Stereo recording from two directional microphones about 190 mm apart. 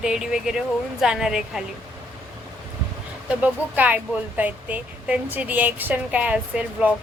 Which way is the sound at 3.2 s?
10° right (ahead or behind).